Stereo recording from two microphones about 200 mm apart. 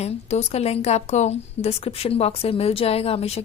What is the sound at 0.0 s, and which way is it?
A woman's voice, 30° left (ahead or behind).